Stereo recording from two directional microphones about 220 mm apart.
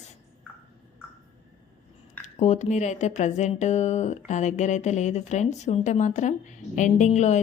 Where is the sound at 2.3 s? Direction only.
30° left (ahead or behind).